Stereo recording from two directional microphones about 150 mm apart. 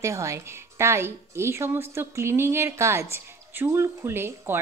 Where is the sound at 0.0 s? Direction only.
20° right (ahead or behind).